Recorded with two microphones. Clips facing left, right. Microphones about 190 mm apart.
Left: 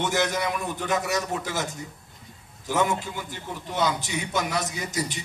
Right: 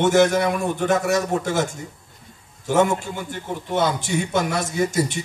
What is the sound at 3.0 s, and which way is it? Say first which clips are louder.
A man's voice: right 5 dB; 50° right (ahead or behind).